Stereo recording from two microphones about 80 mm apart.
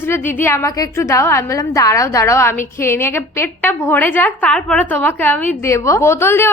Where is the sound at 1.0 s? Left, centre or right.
Left.